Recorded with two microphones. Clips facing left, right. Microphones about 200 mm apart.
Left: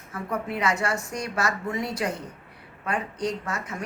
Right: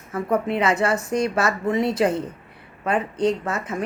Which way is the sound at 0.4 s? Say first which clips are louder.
Right 6 dB; 25° right (ahead or behind).